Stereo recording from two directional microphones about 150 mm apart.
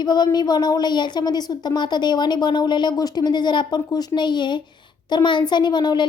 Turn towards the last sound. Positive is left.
turn(degrees=30)  # may be behind; listen again after turning